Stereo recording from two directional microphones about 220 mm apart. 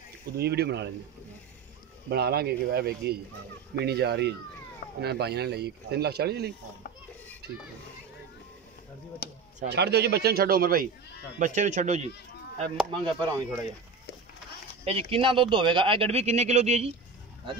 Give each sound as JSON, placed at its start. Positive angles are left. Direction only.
{"t": 0.4, "sound": "speech", "side_deg": -45}
{"t": 2.0, "sound": "speech", "side_deg": -45}
{"t": 9.2, "sound": "speech", "side_deg": 45}
{"t": 9.7, "sound": "speech", "side_deg": -50}
{"t": 13.0, "sound": "speech", "side_deg": -20}
{"t": 14.9, "sound": "speech", "side_deg": -25}